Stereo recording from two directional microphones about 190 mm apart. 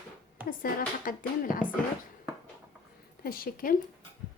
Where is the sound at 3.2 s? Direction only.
50° left (ahead or behind).